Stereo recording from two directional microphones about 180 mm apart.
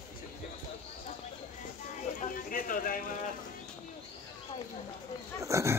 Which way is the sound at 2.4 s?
50° left (ahead or behind).